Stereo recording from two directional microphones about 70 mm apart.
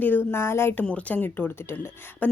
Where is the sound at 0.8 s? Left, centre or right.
Centre.